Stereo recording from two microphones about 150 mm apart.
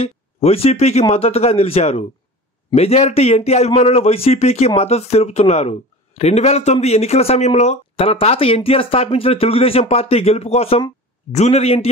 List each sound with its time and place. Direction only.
0.0 s speech: 40° left (ahead or behind)